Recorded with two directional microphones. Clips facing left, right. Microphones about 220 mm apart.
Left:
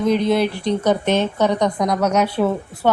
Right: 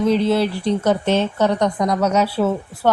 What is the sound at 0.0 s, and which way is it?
Speech, 15° left (ahead or behind).